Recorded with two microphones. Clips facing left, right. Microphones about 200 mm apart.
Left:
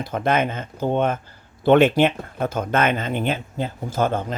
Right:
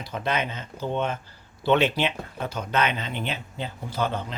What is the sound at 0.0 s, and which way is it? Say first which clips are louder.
A man's voice: left 7 dB; 50° left (ahead or behind).